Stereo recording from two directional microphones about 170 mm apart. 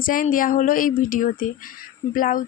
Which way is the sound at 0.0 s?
55° left (ahead or behind).